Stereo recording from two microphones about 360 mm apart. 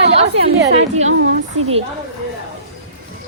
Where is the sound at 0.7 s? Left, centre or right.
Centre.